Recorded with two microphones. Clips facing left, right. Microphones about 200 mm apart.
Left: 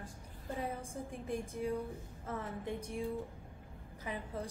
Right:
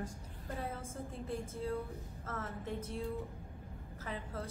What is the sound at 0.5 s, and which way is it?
A woman's voice, 15° left (ahead or behind).